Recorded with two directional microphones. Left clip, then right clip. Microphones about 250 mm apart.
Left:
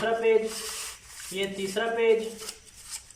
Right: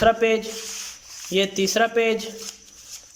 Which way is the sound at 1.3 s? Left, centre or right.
Right.